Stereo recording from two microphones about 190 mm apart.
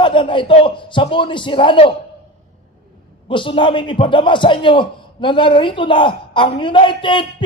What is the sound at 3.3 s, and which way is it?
A man's voice, 25° left (ahead or behind).